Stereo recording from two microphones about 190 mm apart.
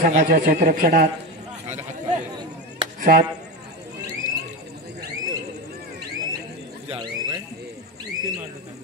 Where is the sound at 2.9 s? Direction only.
50° right (ahead or behind).